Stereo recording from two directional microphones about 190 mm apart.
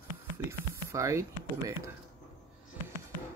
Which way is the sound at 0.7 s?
15° right (ahead or behind).